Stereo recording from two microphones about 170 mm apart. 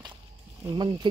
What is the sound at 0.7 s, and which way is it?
Speech, 25° right (ahead or behind).